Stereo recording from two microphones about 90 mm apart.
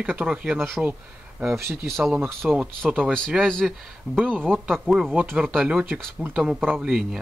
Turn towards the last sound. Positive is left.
turn(degrees=-5)  # may be behind; listen again after turning